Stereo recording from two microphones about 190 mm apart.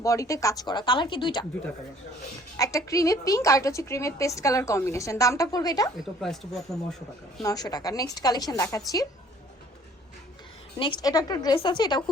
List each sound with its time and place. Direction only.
0.0 s speech: 15° left (ahead or behind)
2.6 s a woman's voice: 15° left (ahead or behind)
6.0 s speech: centre (ahead or behind)
7.4 s speech: 20° left (ahead or behind)
10.8 s speech: 25° left (ahead or behind)